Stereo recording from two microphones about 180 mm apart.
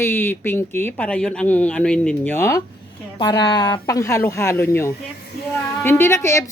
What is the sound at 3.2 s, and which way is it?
A woman's voice, 25° left (ahead or behind).